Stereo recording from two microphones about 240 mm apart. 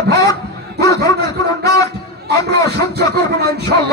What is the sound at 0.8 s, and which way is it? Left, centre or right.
Speech, centre.